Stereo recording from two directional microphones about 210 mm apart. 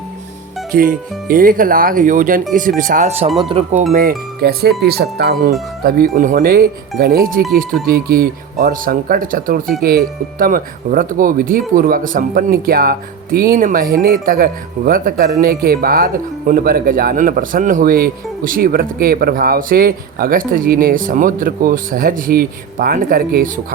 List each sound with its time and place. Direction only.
0.7 s speech: 40° right (ahead or behind)
4.4 s a man's voice: 50° right (ahead or behind)